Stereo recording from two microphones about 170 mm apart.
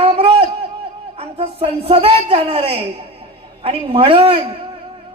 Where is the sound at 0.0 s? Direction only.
35° right (ahead or behind).